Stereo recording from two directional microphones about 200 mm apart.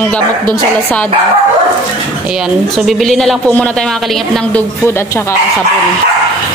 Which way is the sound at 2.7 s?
Centre (ahead or behind).